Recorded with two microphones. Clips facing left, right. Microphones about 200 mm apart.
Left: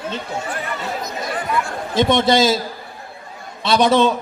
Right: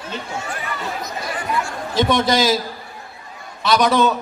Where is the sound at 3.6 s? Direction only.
30° left (ahead or behind).